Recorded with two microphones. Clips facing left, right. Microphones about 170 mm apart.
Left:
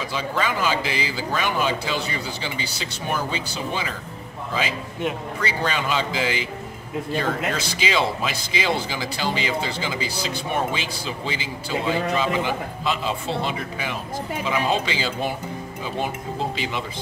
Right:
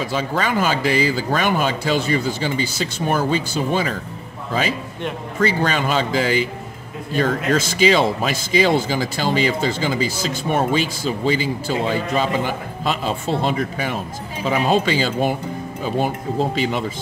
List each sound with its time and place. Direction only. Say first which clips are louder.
0.1 s speech: right 2 dB; 50° right (ahead or behind)
5.4 s speech: right 7 dB; 45° right (ahead or behind)
16.5 s speech: right 7 dB; 45° right (ahead or behind)